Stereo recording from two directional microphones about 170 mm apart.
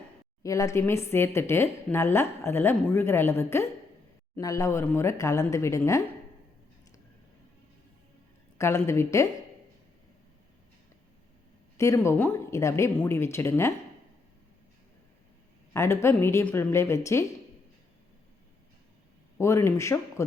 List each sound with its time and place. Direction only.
0.4 s a woman's voice: 20° left (ahead or behind)
8.5 s a woman's voice: 15° left (ahead or behind)
11.8 s a woman's voice: 15° left (ahead or behind)
15.7 s a woman's voice: 15° left (ahead or behind)
19.4 s a woman's voice: 15° left (ahead or behind)